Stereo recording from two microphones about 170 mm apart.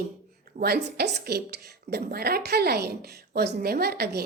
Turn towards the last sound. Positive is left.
turn(degrees=-70)  # may be behind; listen again after turning